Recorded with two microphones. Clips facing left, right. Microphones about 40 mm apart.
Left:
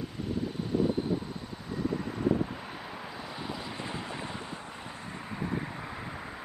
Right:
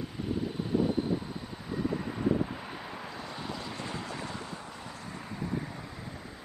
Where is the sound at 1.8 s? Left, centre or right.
Centre.